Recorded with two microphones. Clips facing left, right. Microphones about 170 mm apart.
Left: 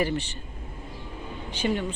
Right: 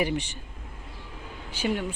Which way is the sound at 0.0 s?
15° right (ahead or behind).